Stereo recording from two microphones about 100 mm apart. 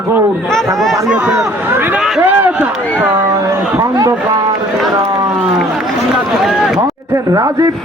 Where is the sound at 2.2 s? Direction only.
15° right (ahead or behind).